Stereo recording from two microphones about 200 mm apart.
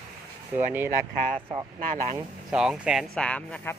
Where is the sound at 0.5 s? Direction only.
10° right (ahead or behind).